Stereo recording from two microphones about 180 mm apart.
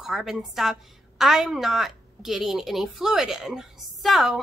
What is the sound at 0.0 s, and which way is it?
Speech, centre (ahead or behind).